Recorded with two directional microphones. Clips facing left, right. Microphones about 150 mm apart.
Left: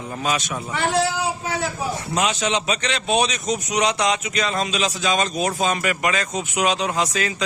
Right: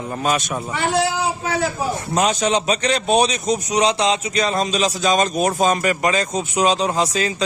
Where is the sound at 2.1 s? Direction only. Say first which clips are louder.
Right 4 dB; 40° right (ahead or behind).